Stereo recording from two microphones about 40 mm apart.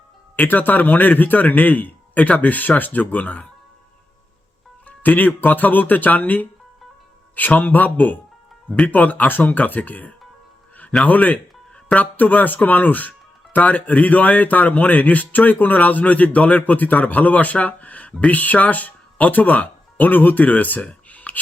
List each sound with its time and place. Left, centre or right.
0.3 s speech: left
4.9 s speech: left
20.8 s a sound: left